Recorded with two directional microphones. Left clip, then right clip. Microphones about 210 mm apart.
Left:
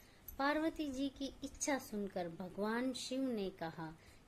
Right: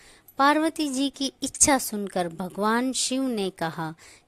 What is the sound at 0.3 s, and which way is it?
A woman's voice, 50° right (ahead or behind).